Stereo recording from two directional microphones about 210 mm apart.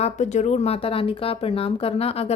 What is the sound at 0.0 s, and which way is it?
A woman's voice, 35° left (ahead or behind).